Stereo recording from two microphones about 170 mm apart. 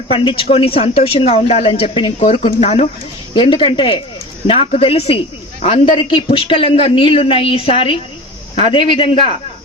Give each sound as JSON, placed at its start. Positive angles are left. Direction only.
{"t": 0.1, "sound": "a man's voice", "side_deg": 30}